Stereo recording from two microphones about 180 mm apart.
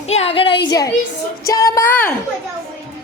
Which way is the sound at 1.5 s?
20° left (ahead or behind).